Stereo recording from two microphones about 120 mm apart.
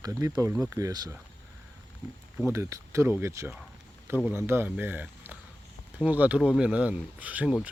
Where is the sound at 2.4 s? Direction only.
25° right (ahead or behind).